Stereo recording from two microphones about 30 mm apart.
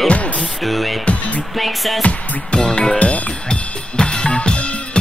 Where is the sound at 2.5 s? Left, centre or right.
Left.